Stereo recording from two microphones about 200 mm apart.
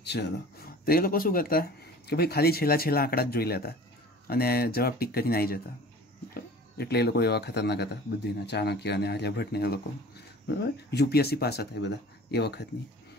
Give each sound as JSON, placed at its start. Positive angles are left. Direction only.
{"t": 0.0, "sound": "speech", "side_deg": 55}